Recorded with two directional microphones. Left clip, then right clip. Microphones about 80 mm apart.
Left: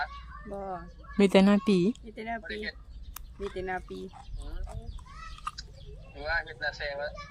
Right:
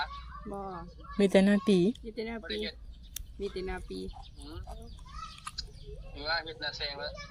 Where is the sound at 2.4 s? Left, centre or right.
Centre.